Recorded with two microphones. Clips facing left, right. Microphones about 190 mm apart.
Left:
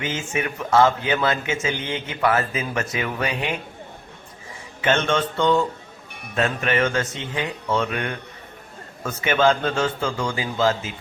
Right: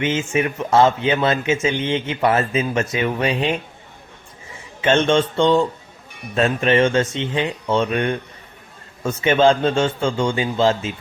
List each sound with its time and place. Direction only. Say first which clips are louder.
0.0 s speech: right 6 dB; 25° right (ahead or behind)
4.8 s speech: right 5 dB; 25° right (ahead or behind)